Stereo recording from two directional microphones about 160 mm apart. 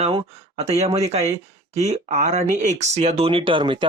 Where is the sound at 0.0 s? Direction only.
35° right (ahead or behind).